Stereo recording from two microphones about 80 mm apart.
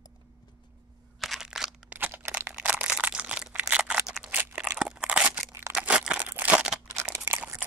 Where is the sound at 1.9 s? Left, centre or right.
Right.